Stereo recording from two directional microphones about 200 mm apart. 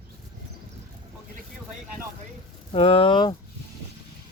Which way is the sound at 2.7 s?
30° left (ahead or behind).